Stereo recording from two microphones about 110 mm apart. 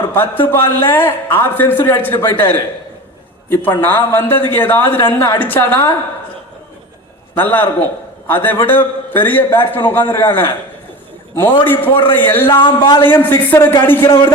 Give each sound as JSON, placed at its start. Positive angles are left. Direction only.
{"t": 0.1, "sound": "a man's voice", "side_deg": 20}
{"t": 7.3, "sound": "a man's voice", "side_deg": 15}
{"t": 11.6, "sound": "a man's voice", "side_deg": 20}
{"t": 12.5, "sound": "speech", "side_deg": 50}
{"t": 13.1, "sound": "a man's voice", "side_deg": 20}